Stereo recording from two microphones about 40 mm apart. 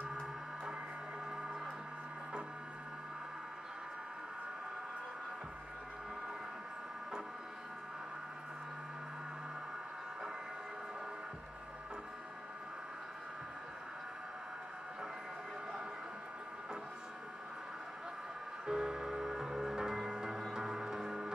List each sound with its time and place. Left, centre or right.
18.7 s music: right